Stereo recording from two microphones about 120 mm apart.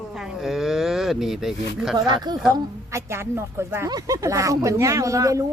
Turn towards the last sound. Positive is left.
turn(degrees=-25)  # may be behind; listen again after turning